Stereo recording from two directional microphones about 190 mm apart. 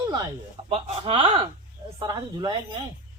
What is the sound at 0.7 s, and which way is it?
Speech, 30° right (ahead or behind).